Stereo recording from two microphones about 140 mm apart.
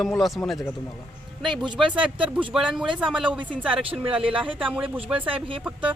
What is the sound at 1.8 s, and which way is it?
Speech, 35° right (ahead or behind).